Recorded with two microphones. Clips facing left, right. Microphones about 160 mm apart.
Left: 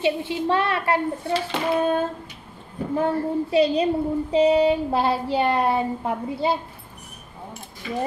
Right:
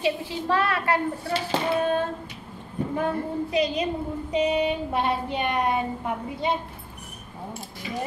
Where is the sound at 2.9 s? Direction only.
30° left (ahead or behind).